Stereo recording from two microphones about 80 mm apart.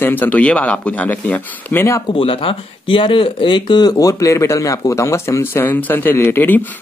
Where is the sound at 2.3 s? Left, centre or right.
Left.